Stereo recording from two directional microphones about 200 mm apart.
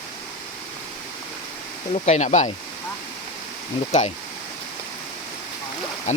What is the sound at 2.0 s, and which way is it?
Speech, 35° left (ahead or behind).